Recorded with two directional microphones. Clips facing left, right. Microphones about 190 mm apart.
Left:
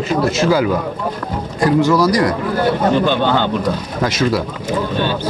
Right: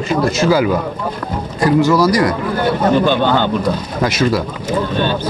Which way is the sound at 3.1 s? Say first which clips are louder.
Right 1 dB; 45° right (ahead or behind).